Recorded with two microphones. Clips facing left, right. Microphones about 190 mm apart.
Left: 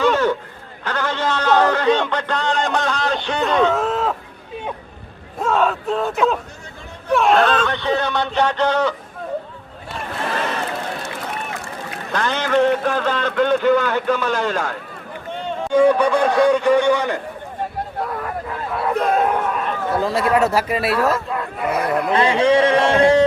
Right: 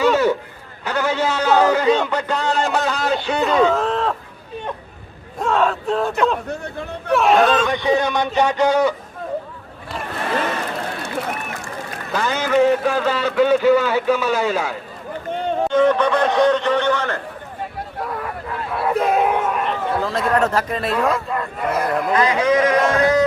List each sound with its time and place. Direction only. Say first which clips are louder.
0.0 s honk: right 1 dB; 10° right (ahead or behind)
0.9 s a man's voice: right 2 dB; 10° right (ahead or behind)
5.4 s a man's voice: even; centre (ahead or behind)
12.1 s a man's voice: right 1 dB; 5° right (ahead or behind)
15.7 s speech: left 3 dB; 10° left (ahead or behind)
18.7 s a sound: right 1 dB; 5° right (ahead or behind)
20.0 s speech: left 3 dB; 10° left (ahead or behind)
22.1 s a man's voice: left 2 dB; 30° left (ahead or behind)